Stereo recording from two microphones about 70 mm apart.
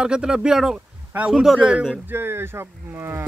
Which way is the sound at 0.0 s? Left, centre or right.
Centre.